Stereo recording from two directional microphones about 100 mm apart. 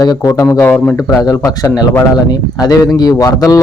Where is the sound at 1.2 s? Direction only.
35° left (ahead or behind).